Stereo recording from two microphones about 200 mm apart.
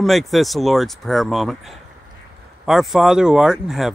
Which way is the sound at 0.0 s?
Centre (ahead or behind).